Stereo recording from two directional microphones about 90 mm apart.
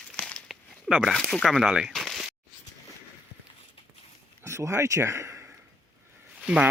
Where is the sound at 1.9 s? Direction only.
Centre (ahead or behind).